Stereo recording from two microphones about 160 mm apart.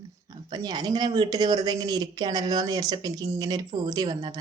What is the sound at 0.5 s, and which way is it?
Speech, 25° right (ahead or behind).